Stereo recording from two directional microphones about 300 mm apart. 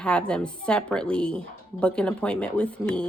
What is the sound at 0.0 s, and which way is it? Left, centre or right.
A woman's voice, centre.